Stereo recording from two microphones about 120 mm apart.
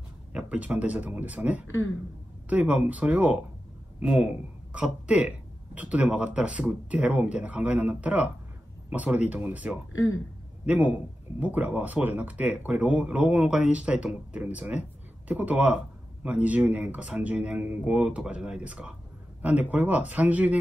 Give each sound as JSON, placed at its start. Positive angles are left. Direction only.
{"t": 0.3, "sound": "speech", "side_deg": -10}